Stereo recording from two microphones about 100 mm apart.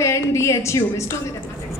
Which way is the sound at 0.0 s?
30° left (ahead or behind).